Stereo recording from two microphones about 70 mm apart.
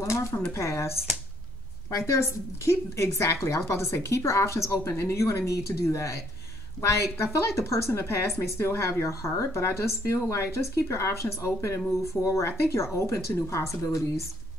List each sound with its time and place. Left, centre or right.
0.0 s speech: left